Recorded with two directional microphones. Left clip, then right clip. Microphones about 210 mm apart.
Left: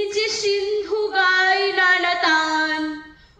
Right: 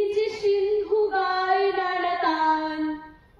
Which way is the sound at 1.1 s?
5° left (ahead or behind).